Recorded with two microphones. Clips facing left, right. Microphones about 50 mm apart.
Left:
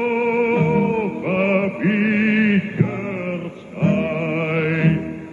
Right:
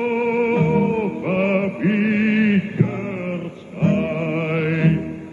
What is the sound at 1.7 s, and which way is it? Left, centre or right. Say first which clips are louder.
Chant: even; centre.